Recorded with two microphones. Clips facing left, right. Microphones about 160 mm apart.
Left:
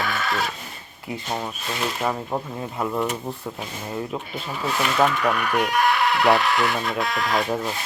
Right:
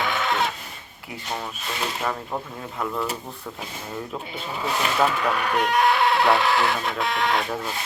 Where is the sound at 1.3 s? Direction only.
15° left (ahead or behind).